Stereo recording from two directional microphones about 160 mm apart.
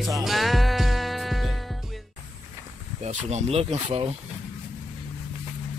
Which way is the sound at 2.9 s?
45° right (ahead or behind).